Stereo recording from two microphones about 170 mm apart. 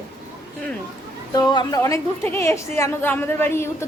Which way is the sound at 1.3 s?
25° left (ahead or behind).